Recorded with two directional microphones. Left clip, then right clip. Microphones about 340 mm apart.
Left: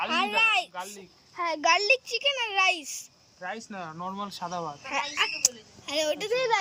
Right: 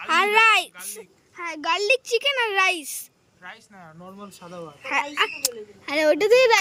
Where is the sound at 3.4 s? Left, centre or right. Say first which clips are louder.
Left 6 dB; left.